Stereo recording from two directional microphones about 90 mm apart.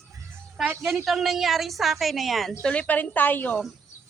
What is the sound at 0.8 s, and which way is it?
A woman's voice, centre (ahead or behind).